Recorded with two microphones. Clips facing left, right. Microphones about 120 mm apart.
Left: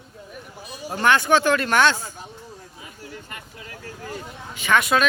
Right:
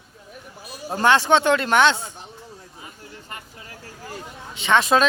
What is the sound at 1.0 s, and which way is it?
Speech, 30° right (ahead or behind).